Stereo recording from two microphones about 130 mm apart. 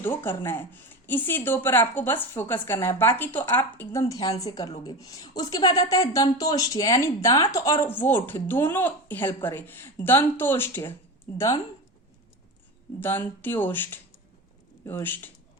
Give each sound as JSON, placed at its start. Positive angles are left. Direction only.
{"t": 0.0, "sound": "speech", "side_deg": 15}
{"t": 4.4, "sound": "a woman's voice", "side_deg": 30}
{"t": 13.0, "sound": "speech", "side_deg": 15}